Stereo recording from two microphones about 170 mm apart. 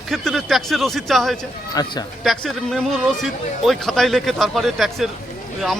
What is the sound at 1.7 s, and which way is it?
Speech, 25° left (ahead or behind).